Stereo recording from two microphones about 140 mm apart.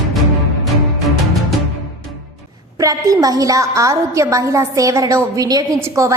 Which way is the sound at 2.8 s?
25° right (ahead or behind).